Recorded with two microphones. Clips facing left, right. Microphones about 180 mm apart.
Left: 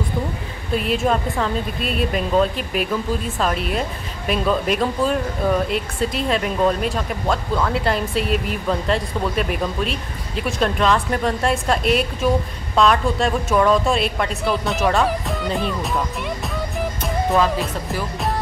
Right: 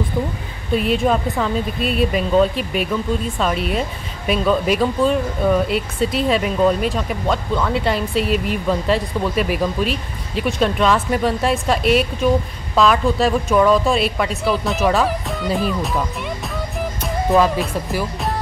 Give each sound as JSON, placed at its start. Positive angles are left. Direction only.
{"t": 0.7, "sound": "speech", "side_deg": 0}
{"t": 17.3, "sound": "speech", "side_deg": 0}